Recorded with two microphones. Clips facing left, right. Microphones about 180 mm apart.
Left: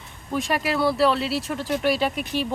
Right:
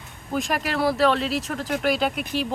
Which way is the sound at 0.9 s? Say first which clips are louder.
Even; 5° left (ahead or behind).